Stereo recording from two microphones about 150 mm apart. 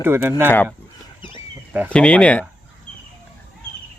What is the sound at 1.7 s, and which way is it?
Speech, 10° right (ahead or behind).